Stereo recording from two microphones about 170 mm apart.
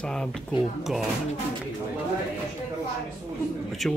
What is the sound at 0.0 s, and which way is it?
Speech, 5° left (ahead or behind).